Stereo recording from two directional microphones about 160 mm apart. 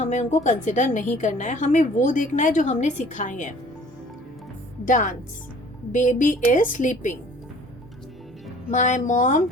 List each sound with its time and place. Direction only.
0.0 s a woman's voice: 45° left (ahead or behind)
4.9 s a woman's voice: 55° left (ahead or behind)
8.7 s a woman's voice: 50° left (ahead or behind)